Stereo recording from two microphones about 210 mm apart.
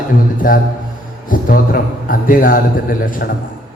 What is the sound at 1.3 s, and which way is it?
A man's voice, 40° left (ahead or behind).